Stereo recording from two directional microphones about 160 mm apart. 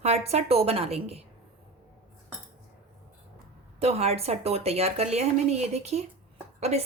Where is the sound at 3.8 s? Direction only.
40° right (ahead or behind).